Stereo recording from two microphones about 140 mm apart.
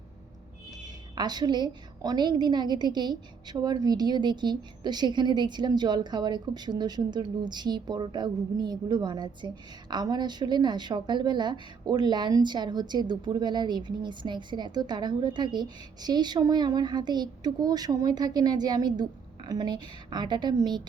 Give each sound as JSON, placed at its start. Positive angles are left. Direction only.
{"t": 1.1, "sound": "a woman's voice", "side_deg": -30}